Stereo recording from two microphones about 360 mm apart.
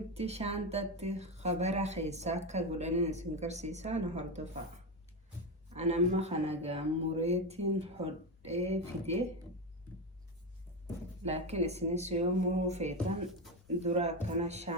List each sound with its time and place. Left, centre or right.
0.1 s speech: centre
5.7 s speech: centre
11.3 s speech: centre